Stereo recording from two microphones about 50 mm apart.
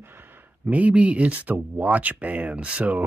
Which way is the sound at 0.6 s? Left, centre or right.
Right.